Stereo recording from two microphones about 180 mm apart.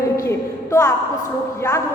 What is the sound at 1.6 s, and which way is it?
Speech, 15° left (ahead or behind).